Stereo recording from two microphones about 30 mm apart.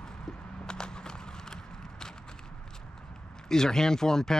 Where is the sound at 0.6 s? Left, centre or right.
Left.